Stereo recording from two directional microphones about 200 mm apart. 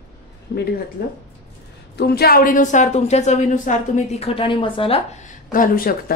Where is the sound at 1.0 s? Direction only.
50° left (ahead or behind).